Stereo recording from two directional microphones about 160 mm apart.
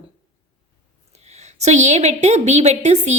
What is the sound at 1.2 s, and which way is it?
A woman's voice, 45° right (ahead or behind).